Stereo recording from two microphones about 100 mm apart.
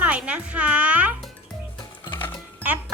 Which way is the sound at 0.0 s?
10° right (ahead or behind).